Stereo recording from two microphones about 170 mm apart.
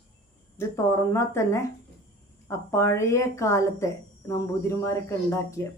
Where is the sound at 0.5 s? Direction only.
15° left (ahead or behind).